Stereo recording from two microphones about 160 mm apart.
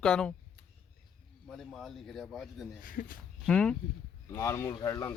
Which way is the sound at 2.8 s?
60° left (ahead or behind).